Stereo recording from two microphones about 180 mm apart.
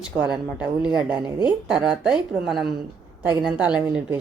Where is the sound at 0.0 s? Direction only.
5° right (ahead or behind).